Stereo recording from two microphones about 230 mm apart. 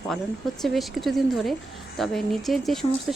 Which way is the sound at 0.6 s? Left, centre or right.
Centre.